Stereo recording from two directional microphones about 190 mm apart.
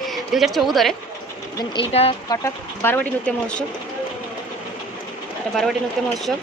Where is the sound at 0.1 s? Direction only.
Centre (ahead or behind).